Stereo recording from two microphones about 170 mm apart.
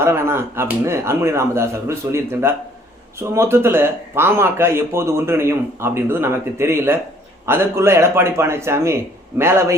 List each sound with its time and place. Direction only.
0.0 s a man's voice: 15° right (ahead or behind)